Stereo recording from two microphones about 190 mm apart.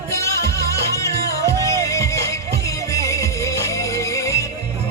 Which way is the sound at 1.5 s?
15° left (ahead or behind).